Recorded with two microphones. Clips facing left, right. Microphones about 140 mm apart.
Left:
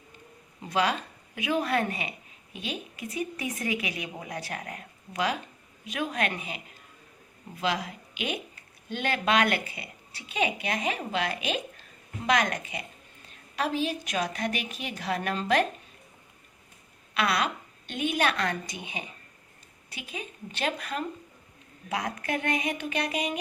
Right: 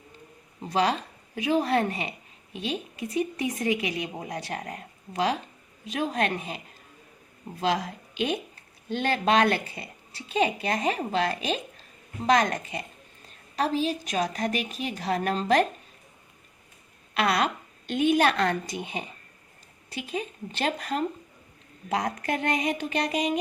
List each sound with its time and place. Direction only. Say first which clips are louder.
0.7 s a woman's voice: right 2 dB; 35° right (ahead or behind)
17.2 s a woman's voice: right 3 dB; 40° right (ahead or behind)